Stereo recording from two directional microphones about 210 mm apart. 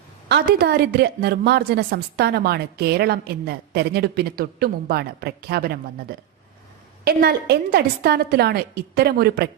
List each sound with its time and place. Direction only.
0.3 s a woman's voice: 50° right (ahead or behind)